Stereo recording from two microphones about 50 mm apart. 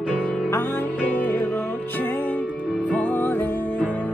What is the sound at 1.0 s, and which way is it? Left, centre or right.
Music, left.